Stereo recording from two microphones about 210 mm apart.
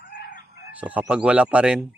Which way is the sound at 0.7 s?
5° right (ahead or behind).